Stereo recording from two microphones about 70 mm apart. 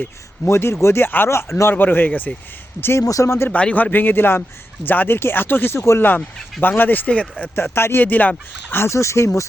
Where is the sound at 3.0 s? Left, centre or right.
Left.